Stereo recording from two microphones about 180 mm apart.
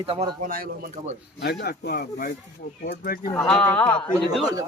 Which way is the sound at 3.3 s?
10° left (ahead or behind).